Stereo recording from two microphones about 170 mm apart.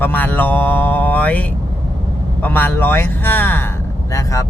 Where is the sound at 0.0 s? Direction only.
10° left (ahead or behind).